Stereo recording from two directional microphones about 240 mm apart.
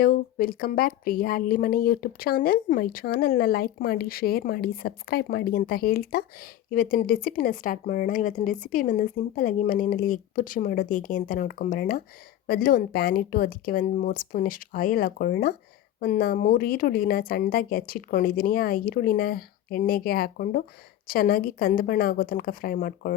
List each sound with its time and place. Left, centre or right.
0.0 s a woman's voice: left